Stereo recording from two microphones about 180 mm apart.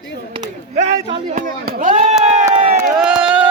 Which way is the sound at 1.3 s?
50° right (ahead or behind).